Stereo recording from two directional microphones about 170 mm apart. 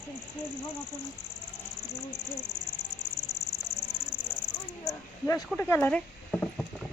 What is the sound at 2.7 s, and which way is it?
Cricket, 25° left (ahead or behind).